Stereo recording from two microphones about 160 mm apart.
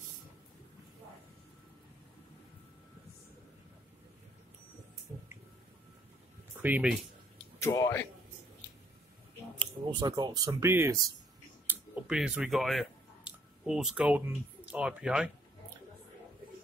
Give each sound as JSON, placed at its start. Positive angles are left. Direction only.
{"t": 6.6, "sound": "speech", "side_deg": -10}
{"t": 7.6, "sound": "speech", "side_deg": 20}
{"t": 9.6, "sound": "speech", "side_deg": -30}
{"t": 11.6, "sound": "a sound", "side_deg": -10}